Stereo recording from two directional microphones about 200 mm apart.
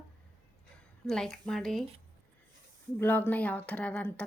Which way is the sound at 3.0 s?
10° left (ahead or behind).